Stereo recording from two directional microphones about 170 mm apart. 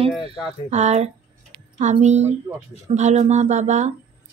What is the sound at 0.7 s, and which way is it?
Speech, 40° right (ahead or behind).